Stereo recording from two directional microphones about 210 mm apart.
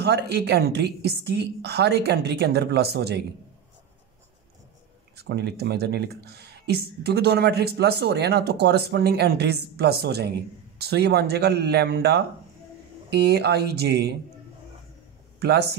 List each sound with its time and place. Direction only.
0.0 s speech: 50° right (ahead or behind)
5.1 s speech: 50° right (ahead or behind)
15.3 s speech: 50° right (ahead or behind)